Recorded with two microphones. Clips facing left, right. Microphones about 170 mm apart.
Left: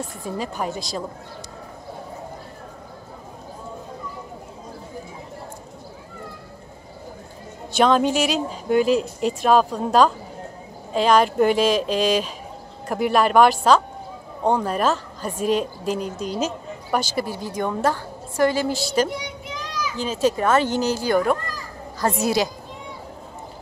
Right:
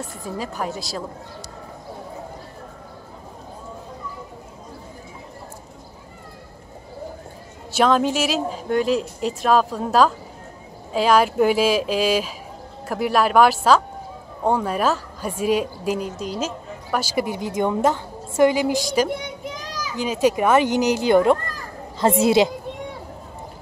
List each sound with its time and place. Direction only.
0.4 s speech: centre (ahead or behind)
7.7 s a woman's voice: centre (ahead or behind)
17.1 s a woman's voice: 15° right (ahead or behind)
19.0 s child singing: 50° right (ahead or behind)
20.0 s a woman's voice: 15° right (ahead or behind)